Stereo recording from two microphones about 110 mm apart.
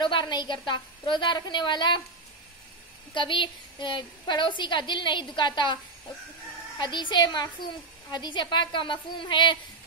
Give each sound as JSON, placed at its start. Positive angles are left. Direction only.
{"t": 0.0, "sound": "a woman's voice", "side_deg": 45}
{"t": 3.2, "sound": "a woman's voice", "side_deg": 45}
{"t": 6.8, "sound": "a woman's voice", "side_deg": 45}